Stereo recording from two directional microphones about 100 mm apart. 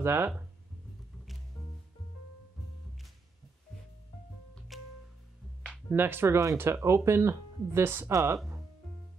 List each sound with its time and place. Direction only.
0.0 s speech: 25° right (ahead or behind)
4.7 s music: centre (ahead or behind)
5.9 s speech: 20° right (ahead or behind)